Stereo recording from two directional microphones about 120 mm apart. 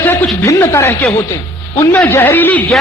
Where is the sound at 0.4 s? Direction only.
20° left (ahead or behind).